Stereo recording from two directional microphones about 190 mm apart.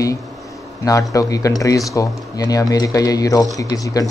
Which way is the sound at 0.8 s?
15° left (ahead or behind).